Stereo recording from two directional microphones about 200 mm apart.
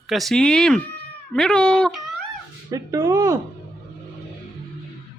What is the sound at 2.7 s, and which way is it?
Speech, 15° right (ahead or behind).